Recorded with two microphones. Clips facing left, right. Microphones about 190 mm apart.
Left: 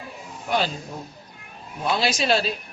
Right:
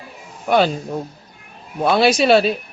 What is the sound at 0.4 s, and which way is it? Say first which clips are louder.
Speech: right 9 dB; 60° right (ahead or behind).